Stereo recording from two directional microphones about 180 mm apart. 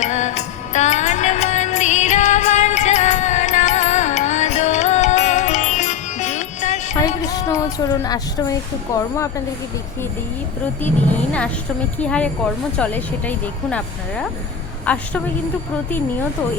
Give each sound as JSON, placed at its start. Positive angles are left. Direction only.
{"t": 0.0, "sound": "music", "side_deg": 40}
{"t": 7.3, "sound": "a sound", "side_deg": 20}
{"t": 8.9, "sound": "speech", "side_deg": 15}
{"t": 10.8, "sound": "speech", "side_deg": 10}